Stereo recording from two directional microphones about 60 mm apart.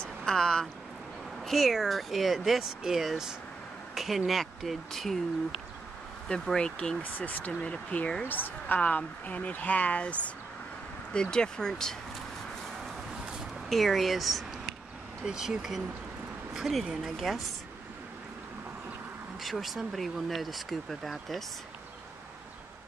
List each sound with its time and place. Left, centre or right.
0.0 s a sound: centre
1.4 s speech: centre
6.4 s speech: centre
7.0 s a woman's voice: left; by 12.0 s centre
13.7 s speech: centre
19.4 s speech: centre